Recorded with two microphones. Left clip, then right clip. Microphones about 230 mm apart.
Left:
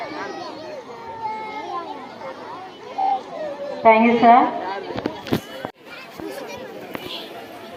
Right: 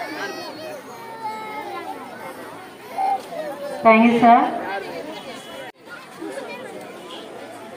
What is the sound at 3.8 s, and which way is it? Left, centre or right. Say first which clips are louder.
A woman's voice: even; right.